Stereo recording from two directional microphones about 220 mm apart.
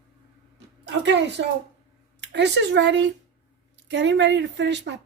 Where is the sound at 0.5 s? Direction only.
50° right (ahead or behind).